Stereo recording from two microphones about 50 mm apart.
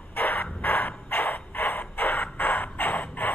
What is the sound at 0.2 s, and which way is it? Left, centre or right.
Crow, left.